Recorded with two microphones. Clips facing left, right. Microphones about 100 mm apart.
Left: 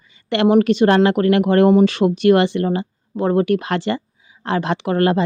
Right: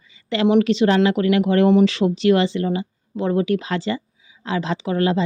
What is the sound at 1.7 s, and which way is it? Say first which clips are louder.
Speech: even; 40° left (ahead or behind).